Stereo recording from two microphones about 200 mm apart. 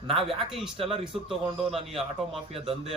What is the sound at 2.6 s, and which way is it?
Speech, 30° right (ahead or behind).